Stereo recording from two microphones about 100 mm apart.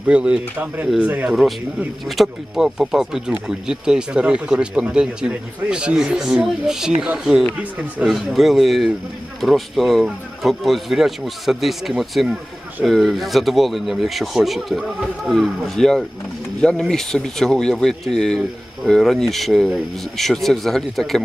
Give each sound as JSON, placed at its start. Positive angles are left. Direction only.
{"t": 0.1, "sound": "speech", "side_deg": -10}
{"t": 2.0, "sound": "speech", "side_deg": 0}
{"t": 8.0, "sound": "speech", "side_deg": 0}